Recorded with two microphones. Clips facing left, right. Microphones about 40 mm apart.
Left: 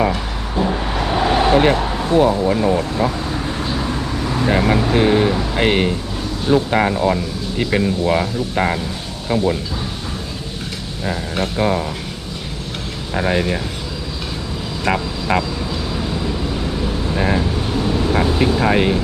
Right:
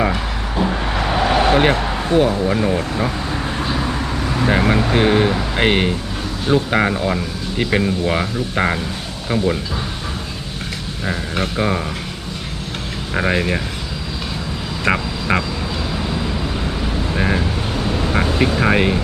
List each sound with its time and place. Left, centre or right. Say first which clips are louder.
0.0 s vehicle: even; centre
2.5 s speech: left 2 dB; centre
4.4 s speech: even; centre
11.0 s speech: even; centre
13.1 s speech: even; centre
14.8 s vehicle: right 1 dB; centre
17.2 s speech: left 1 dB; centre